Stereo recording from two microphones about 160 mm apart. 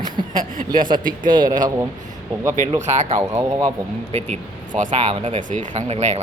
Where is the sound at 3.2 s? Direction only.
20° right (ahead or behind).